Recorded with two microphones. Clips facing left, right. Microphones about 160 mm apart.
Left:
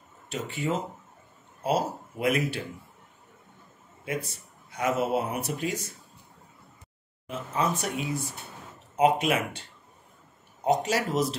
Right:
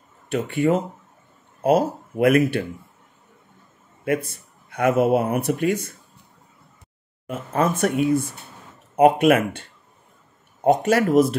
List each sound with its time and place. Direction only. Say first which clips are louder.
0.3 s speech: right 10 dB; 55° right (ahead or behind)
4.0 s speech: right 9 dB; 55° right (ahead or behind)
7.2 s speech: right 6 dB; 55° right (ahead or behind)